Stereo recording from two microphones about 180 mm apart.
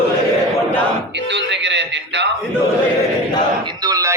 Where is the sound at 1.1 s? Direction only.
75° right (ahead or behind).